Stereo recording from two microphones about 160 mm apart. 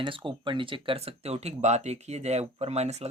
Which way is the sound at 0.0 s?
30° right (ahead or behind).